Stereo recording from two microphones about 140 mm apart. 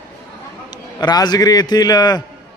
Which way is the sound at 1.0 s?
30° left (ahead or behind).